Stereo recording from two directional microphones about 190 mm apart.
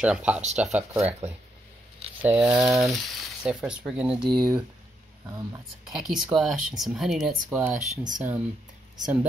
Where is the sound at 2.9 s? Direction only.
Centre (ahead or behind).